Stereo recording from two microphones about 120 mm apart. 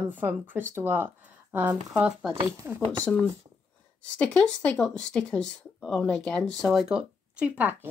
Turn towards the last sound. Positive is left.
turn(degrees=-15)  # may be behind; listen again after turning